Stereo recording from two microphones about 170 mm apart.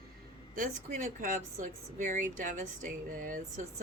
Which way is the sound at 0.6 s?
45° right (ahead or behind).